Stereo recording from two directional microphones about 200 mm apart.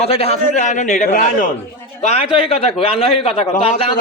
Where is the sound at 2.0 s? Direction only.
30° left (ahead or behind).